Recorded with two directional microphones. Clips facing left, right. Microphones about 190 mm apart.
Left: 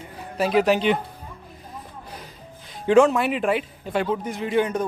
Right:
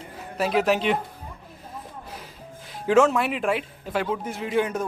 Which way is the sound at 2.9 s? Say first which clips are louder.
Left 3 dB; centre (ahead or behind).